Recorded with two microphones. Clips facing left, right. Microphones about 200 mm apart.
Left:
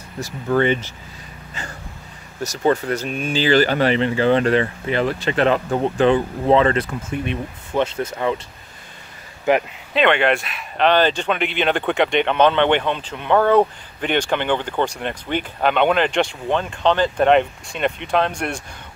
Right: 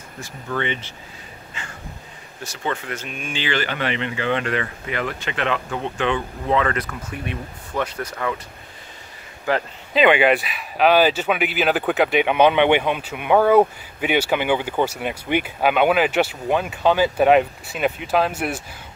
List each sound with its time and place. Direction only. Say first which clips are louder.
0.2 s speech: left 8 dB; 40° left (ahead or behind)
2.4 s speech: left 9 dB; 40° left (ahead or behind); by 8.4 s 25° left (ahead or behind)
9.5 s speech: left 5 dB; 20° left (ahead or behind)
9.9 s speech: right 1 dB; 5° right (ahead or behind)